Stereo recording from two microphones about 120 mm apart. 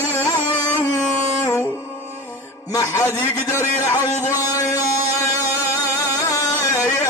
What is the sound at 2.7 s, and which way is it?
Music, 25° left (ahead or behind).